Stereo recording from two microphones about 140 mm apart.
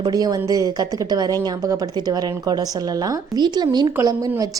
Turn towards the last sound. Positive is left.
turn(degrees=-30)  # may be behind; listen again after turning